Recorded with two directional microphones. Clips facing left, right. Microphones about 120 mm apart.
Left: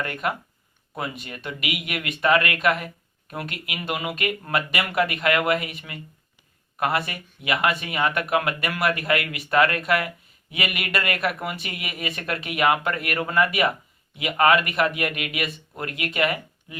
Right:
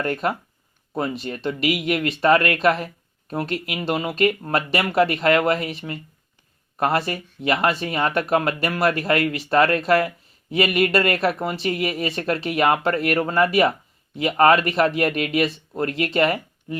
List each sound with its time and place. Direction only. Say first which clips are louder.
0.0 s speech: right 4 dB; 35° right (ahead or behind)